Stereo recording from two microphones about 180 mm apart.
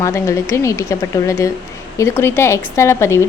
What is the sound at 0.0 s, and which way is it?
A woman's voice, 15° left (ahead or behind).